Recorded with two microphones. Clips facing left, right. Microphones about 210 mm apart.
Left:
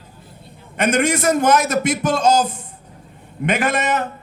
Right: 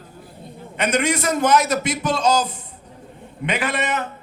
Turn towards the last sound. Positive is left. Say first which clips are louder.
# left 4 dB
turn(degrees=45)  # may be behind; listen again after turning